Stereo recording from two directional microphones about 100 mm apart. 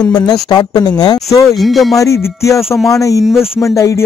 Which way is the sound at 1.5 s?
Centre (ahead or behind).